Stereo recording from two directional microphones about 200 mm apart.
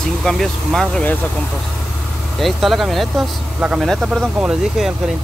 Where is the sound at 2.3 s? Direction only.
Centre (ahead or behind).